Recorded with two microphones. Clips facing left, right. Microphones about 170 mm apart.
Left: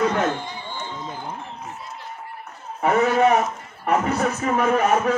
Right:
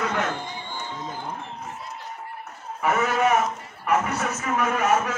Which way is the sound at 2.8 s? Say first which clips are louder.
Left 4 dB; 35° left (ahead or behind).